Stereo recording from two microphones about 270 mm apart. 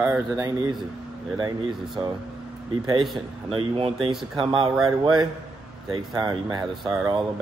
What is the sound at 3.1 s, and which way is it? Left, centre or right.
Speech, centre.